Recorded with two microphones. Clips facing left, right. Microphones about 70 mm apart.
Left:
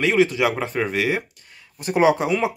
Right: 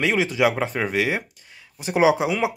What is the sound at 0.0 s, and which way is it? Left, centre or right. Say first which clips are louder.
Speech: left 2 dB; centre.